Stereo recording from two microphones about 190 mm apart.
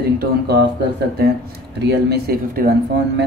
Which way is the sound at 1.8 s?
60° right (ahead or behind).